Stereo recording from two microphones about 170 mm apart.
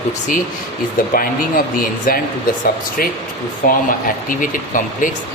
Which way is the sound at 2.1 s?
55° left (ahead or behind).